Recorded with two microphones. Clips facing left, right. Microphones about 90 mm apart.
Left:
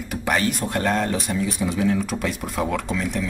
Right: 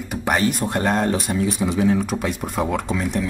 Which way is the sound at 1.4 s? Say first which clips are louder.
Right 3 dB; 25° right (ahead or behind).